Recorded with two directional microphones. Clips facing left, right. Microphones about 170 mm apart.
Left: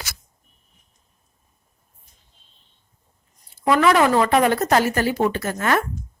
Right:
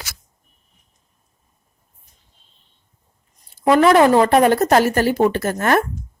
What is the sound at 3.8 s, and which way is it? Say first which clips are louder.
Speech: right 4 dB; 35° right (ahead or behind).